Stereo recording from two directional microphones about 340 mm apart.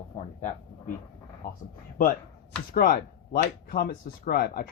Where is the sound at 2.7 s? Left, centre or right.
Left.